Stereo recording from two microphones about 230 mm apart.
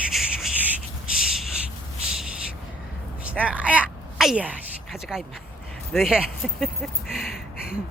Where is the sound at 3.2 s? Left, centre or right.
Centre.